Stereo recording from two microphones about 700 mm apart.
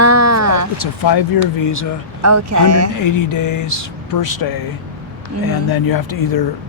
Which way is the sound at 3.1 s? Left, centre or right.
Left.